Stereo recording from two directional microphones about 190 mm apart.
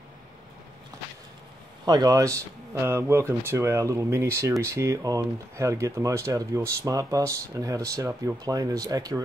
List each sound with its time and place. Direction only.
1.9 s speech: 20° right (ahead or behind)